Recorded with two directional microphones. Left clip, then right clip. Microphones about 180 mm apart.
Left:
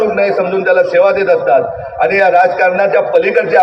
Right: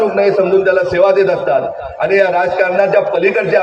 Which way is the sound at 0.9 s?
30° right (ahead or behind).